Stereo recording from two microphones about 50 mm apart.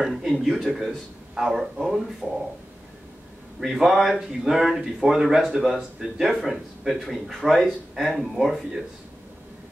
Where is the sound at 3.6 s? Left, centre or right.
Centre.